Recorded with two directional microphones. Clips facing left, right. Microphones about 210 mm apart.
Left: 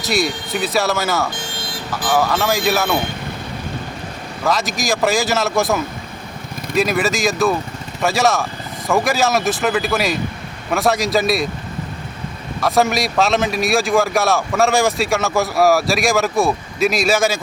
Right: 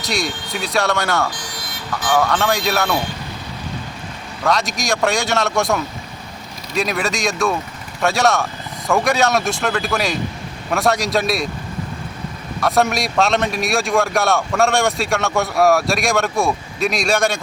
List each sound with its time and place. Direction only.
0.0 s a man's voice: centre (ahead or behind)
1.3 s vehicle: 25° left (ahead or behind)
2.0 s a man's voice: 5° left (ahead or behind)
4.4 s a man's voice: centre (ahead or behind)
12.5 s a man's voice: centre (ahead or behind)